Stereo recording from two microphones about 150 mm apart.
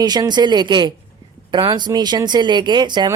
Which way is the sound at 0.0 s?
25° right (ahead or behind).